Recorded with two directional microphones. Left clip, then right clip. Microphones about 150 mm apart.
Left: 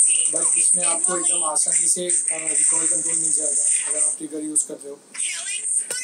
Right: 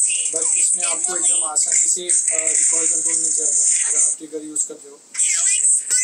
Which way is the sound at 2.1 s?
45° right (ahead or behind).